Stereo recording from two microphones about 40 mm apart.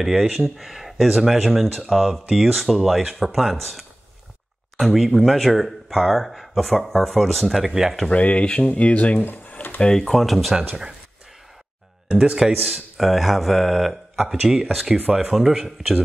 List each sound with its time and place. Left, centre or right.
0.0 s speech: centre
4.8 s speech: centre
7.7 s speech: centre
8.1 s speech: left
9.2 s speech: left
9.8 s speech: centre
10.0 s speech: centre
12.2 s speech: centre